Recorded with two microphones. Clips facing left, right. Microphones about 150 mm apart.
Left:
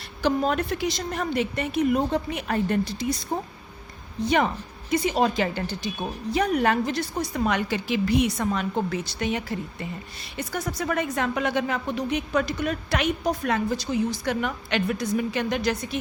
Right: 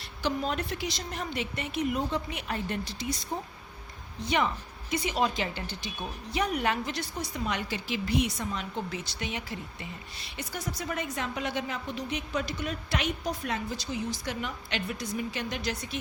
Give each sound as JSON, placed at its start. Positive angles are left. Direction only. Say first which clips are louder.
{"t": 0.2, "sound": "a woman's voice", "louder": "left 7 dB", "side_deg": 50}